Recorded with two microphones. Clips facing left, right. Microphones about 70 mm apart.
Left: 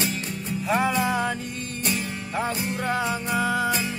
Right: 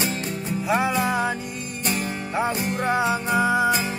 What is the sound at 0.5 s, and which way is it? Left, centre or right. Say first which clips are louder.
Music: right 1 dB; centre.